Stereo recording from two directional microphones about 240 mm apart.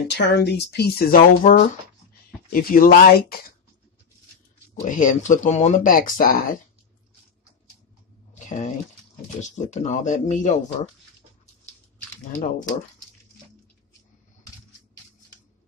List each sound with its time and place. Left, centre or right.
0.1 s speech: left
4.8 s speech: left
8.5 s speech: left
12.3 s speech: left